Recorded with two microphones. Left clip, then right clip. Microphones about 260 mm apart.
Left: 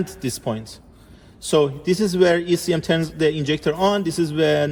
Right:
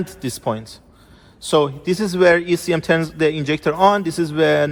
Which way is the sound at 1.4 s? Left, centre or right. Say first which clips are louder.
Right 1 dB; centre.